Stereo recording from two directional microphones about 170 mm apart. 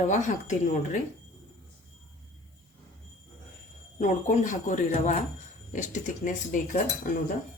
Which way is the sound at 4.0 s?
50° left (ahead or behind).